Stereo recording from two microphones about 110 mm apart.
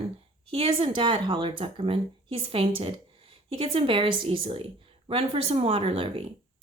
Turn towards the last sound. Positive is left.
turn(degrees=-55)  # may be behind; listen again after turning